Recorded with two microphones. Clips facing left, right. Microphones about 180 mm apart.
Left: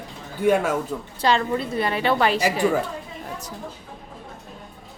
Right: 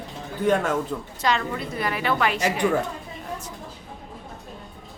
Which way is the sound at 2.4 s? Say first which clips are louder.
Left 1 dB; 5° left (ahead or behind).